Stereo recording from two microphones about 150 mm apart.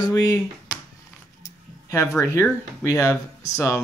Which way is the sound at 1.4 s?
20° left (ahead or behind).